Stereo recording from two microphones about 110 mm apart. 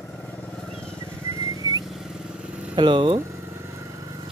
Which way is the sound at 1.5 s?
35° right (ahead or behind).